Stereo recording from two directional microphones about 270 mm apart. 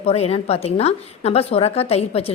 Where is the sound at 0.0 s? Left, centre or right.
Left.